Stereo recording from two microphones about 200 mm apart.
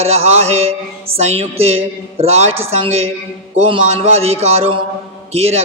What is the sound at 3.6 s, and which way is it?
Speech, 30° right (ahead or behind).